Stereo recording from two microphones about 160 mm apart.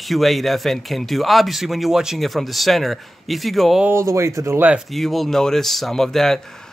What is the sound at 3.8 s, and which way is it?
Speech, 15° right (ahead or behind).